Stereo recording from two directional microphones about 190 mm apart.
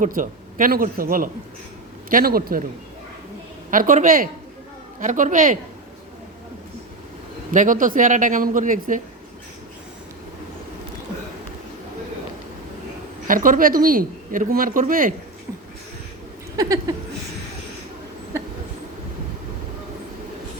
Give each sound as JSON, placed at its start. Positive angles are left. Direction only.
{"t": 0.0, "sound": "speech", "side_deg": -45}
{"t": 3.7, "sound": "speech", "side_deg": -45}
{"t": 7.5, "sound": "speech", "side_deg": -45}
{"t": 13.2, "sound": "speech", "side_deg": -45}
{"t": 16.6, "sound": "a sound", "side_deg": -20}